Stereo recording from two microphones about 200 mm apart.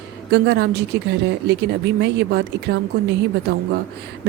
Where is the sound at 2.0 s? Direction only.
55° right (ahead or behind).